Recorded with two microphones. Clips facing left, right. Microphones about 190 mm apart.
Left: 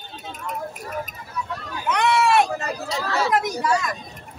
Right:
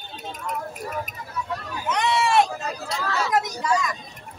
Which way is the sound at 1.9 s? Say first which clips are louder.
Left 2 dB; 60° left (ahead or behind).